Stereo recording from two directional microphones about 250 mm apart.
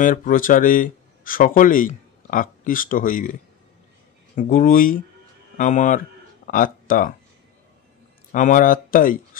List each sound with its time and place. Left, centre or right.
0.0 s speech: left
4.4 s speech: left
8.3 s speech: left